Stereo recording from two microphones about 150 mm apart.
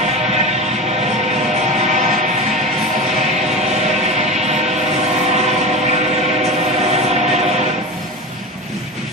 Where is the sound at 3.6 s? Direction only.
50° right (ahead or behind).